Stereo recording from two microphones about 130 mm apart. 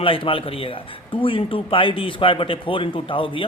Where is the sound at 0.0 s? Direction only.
45° left (ahead or behind).